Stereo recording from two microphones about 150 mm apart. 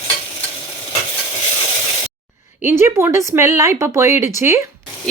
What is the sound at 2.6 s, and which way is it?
Speech, 15° right (ahead or behind).